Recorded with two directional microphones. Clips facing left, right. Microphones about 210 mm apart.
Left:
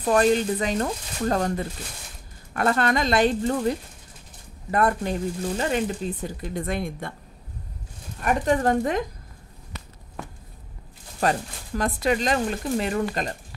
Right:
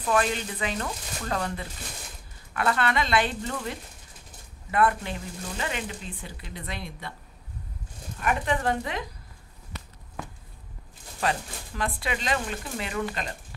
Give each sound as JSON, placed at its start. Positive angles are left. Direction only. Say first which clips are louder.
{"t": 0.0, "sound": "speech", "louder": "left 7 dB", "side_deg": 40}
{"t": 8.2, "sound": "speech", "louder": "left 5 dB", "side_deg": 40}
{"t": 11.1, "sound": "speech", "louder": "left 4 dB", "side_deg": 45}